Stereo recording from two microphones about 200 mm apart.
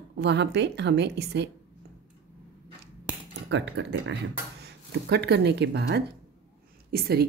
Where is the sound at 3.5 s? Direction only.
65° right (ahead or behind).